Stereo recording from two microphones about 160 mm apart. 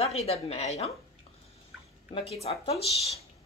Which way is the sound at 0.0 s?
40° left (ahead or behind).